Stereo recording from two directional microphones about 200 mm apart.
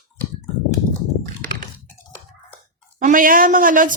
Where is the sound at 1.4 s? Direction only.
45° right (ahead or behind).